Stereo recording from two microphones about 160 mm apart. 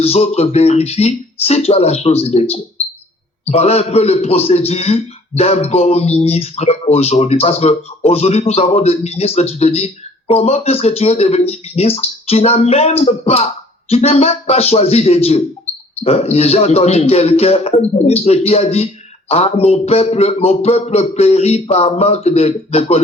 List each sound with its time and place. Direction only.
0.0 s a man's voice: 40° left (ahead or behind)